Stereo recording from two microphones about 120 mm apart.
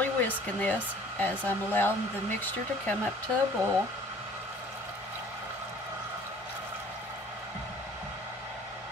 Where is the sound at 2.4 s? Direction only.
15° left (ahead or behind).